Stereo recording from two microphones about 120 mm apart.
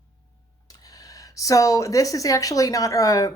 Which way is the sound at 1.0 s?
30° left (ahead or behind).